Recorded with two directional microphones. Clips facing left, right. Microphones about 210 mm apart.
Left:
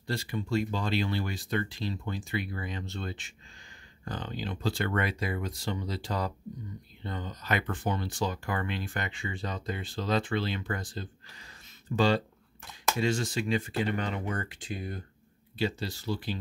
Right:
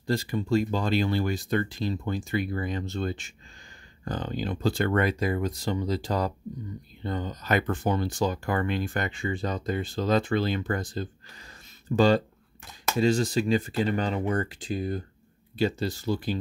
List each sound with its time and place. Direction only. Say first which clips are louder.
0.0 s speech: right 6 dB; 40° right (ahead or behind)
15.5 s speech: right 5 dB; 45° right (ahead or behind)